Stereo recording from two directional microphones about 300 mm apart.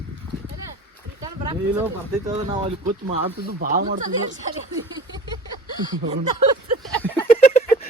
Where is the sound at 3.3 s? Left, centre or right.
Right.